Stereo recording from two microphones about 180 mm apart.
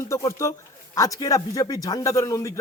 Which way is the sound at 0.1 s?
15° left (ahead or behind).